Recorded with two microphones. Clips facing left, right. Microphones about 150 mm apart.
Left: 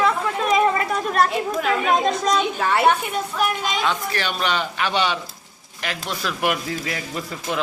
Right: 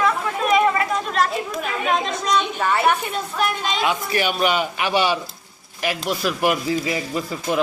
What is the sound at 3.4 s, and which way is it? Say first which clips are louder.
Speech: right 1 dB; 5° left (ahead or behind).